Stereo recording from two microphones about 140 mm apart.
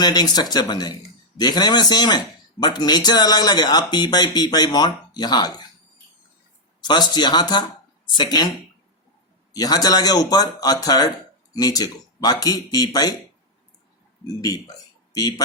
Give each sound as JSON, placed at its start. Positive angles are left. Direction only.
{"t": 0.0, "sound": "speech", "side_deg": 30}
{"t": 6.8, "sound": "speech", "side_deg": 30}
{"t": 14.4, "sound": "speech", "side_deg": 25}